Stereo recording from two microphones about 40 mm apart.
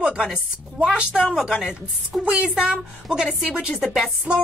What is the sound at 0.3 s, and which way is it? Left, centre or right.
Speech, right.